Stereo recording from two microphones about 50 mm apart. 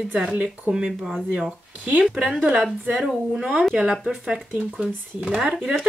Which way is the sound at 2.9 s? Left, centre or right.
Centre.